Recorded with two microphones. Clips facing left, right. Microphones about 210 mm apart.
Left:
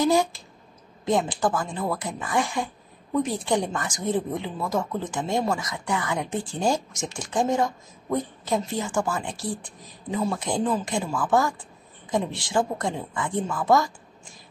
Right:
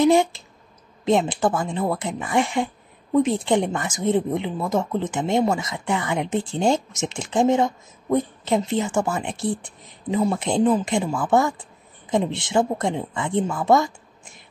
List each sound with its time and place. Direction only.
0.0 s a woman's voice: 25° right (ahead or behind)